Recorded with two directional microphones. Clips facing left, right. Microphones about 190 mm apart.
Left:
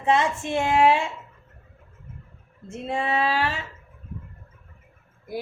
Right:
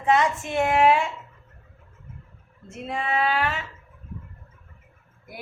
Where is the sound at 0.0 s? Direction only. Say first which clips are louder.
Right 1 dB; 25° left (ahead or behind).